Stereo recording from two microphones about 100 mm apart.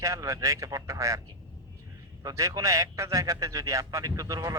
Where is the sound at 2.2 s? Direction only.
35° right (ahead or behind).